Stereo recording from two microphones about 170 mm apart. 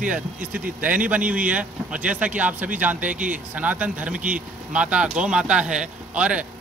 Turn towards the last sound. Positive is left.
turn(degrees=-5)  # may be behind; listen again after turning